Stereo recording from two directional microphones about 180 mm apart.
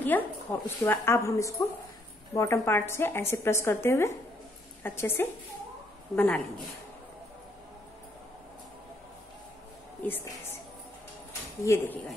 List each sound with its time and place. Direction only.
0.0 s a woman's voice: 10° left (ahead or behind)
10.0 s a woman's voice: 10° left (ahead or behind)
11.6 s a woman's voice: 15° left (ahead or behind)